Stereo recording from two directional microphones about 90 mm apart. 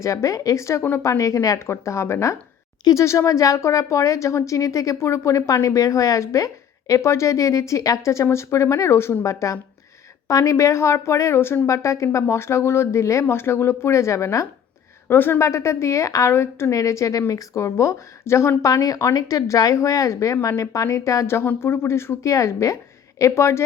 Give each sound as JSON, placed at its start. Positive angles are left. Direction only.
{"t": 0.0, "sound": "a woman's voice", "side_deg": 35}